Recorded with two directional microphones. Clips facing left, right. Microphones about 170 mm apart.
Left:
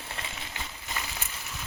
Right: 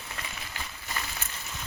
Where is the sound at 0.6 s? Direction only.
20° left (ahead or behind).